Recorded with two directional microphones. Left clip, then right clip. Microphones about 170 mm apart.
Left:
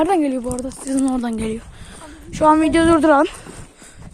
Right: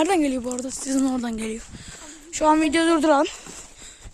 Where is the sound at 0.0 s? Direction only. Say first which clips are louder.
Left 4 dB; 25° right (ahead or behind); by 3.3 s 5° right (ahead or behind).